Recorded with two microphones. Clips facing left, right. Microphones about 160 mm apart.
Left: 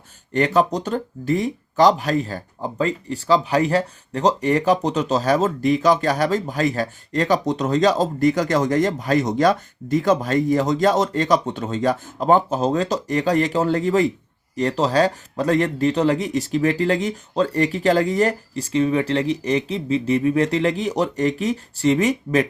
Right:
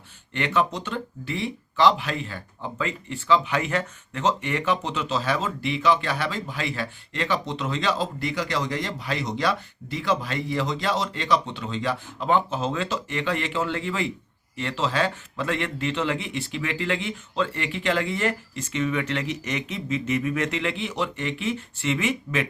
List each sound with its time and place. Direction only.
0.3 s speech: 40° left (ahead or behind)